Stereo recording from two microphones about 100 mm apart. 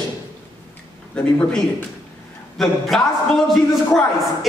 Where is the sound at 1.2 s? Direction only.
10° left (ahead or behind).